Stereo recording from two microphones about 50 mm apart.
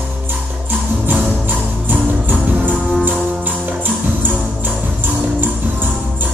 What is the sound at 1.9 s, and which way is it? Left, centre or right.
Music, right.